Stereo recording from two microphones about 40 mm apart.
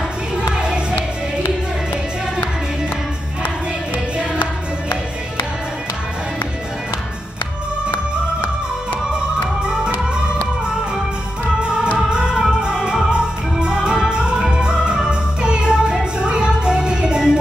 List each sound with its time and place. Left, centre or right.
0.4 s music: right
12.1 s music: right